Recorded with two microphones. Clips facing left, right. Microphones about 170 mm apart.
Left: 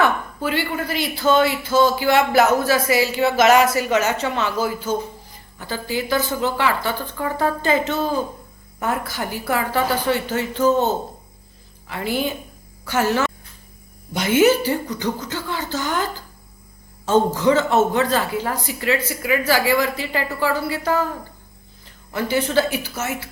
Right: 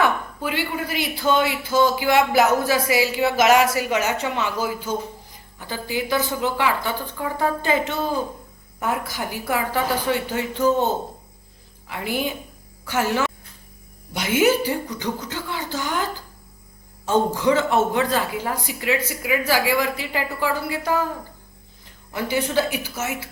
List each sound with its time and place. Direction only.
0.0 s a woman's voice: 15° right (ahead or behind)
11.9 s a woman's voice: 15° right (ahead or behind)
17.1 s a woman's voice: 10° right (ahead or behind)
22.1 s a woman's voice: 15° right (ahead or behind)